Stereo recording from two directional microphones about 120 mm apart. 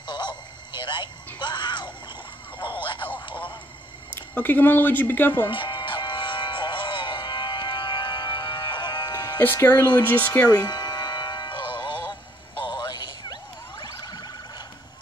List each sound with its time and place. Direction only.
0.0 s a sound: 40° left (ahead or behind)
4.1 s speech: 15° left (ahead or behind)
5.5 s music: 45° left (ahead or behind)
9.4 s speech: 15° left (ahead or behind)
10.5 s music: 35° left (ahead or behind)